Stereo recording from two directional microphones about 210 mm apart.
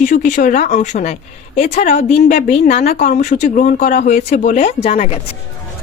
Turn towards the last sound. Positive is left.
turn(degrees=30)  # may be behind; listen again after turning